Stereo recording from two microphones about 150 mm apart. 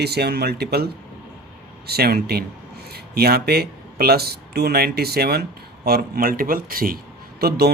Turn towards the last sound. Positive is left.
turn(degrees=-90)